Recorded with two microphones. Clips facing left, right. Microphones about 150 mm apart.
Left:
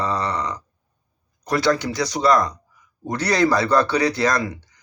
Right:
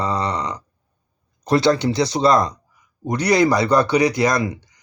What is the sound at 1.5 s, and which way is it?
A man's voice, 25° right (ahead or behind).